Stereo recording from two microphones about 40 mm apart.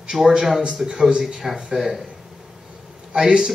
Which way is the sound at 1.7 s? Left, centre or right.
Centre.